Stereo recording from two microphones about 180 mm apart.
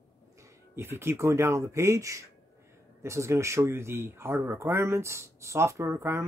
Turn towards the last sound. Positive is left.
turn(degrees=-15)  # may be behind; listen again after turning